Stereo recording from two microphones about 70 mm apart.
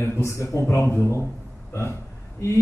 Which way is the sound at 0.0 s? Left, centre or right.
Left.